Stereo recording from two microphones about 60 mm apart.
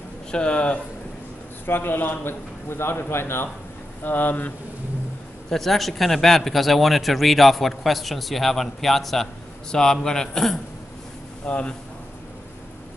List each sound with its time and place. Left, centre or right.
0.3 s speech: centre
1.7 s a man's voice: left
4.0 s a man's voice: left
5.5 s a man's voice: centre
11.4 s speech: centre